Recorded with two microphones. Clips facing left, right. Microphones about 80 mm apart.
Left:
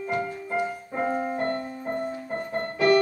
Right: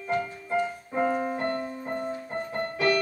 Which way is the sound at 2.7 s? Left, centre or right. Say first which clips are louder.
Left 5 dB; left.